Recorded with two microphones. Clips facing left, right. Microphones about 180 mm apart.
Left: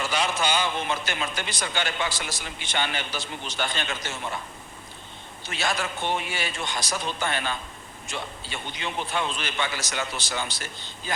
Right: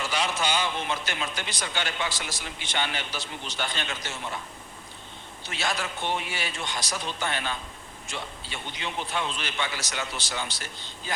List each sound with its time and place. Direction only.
0.0 s a man's voice: 50° left (ahead or behind)
5.5 s a man's voice: 50° left (ahead or behind)